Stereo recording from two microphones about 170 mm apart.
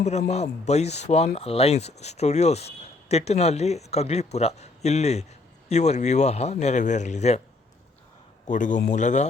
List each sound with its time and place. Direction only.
0.0 s speech: 40° left (ahead or behind)
8.4 s a man's voice: 50° left (ahead or behind)